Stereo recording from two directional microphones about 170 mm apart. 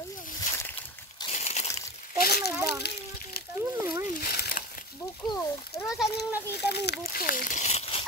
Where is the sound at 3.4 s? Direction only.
65° left (ahead or behind).